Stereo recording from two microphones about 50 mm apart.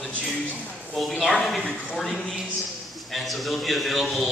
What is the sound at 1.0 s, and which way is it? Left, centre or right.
A man's voice, centre.